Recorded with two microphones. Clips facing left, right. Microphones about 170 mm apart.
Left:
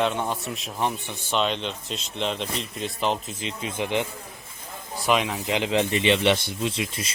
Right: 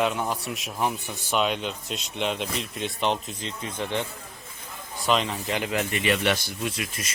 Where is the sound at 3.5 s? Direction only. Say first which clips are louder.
Left 3 dB; 10° left (ahead or behind); by 7.1 s 30° left (ahead or behind).